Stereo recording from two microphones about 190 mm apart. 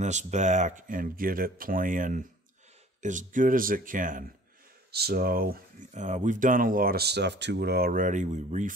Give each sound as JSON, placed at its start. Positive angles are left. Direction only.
{"t": 0.0, "sound": "speech", "side_deg": -40}
{"t": 4.9, "sound": "speech", "side_deg": -55}